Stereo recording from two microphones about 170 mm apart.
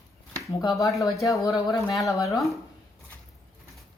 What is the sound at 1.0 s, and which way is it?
Speech, 20° left (ahead or behind).